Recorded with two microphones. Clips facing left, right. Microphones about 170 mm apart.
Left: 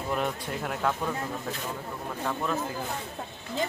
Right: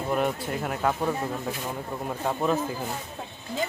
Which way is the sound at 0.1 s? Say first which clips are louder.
Right 4 dB; 5° right (ahead or behind).